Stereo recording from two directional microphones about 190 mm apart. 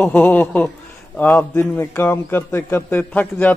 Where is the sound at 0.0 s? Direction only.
10° left (ahead or behind).